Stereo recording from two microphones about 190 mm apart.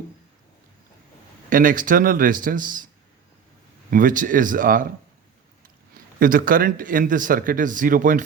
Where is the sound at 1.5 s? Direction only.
45° right (ahead or behind).